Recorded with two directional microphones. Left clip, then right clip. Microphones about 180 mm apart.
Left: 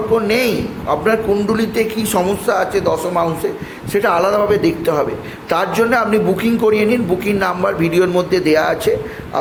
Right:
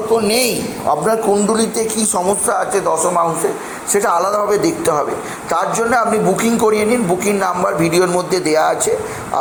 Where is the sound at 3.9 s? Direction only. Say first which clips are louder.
Left 1 dB; 30° left (ahead or behind).